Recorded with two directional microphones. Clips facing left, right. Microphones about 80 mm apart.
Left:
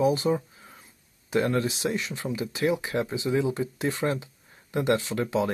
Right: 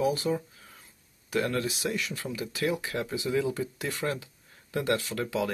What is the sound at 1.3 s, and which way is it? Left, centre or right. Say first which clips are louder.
Speech: left 4 dB; left.